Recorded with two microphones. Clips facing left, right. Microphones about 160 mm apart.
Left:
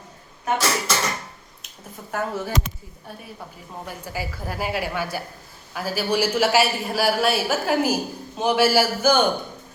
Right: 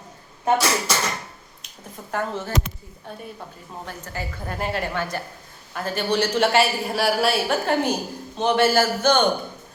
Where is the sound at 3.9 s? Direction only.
10° left (ahead or behind).